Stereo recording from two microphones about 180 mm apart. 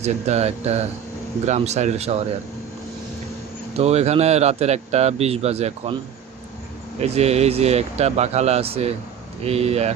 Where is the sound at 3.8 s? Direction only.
35° right (ahead or behind).